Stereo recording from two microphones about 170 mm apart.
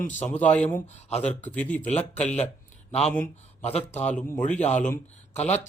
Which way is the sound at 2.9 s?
40° left (ahead or behind).